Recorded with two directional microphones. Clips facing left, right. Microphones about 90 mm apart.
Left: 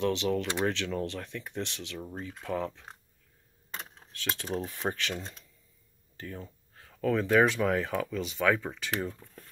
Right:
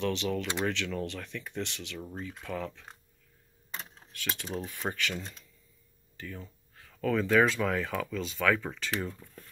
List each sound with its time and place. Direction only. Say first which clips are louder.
0.0 s speech: left 3 dB; 20° left (ahead or behind)
2.4 s speech: left 5 dB; 30° left (ahead or behind)
4.4 s speech: left 4 dB; 50° left (ahead or behind)
4.8 s speech: left 1 dB; 35° left (ahead or behind); by 9.3 s 15° left (ahead or behind)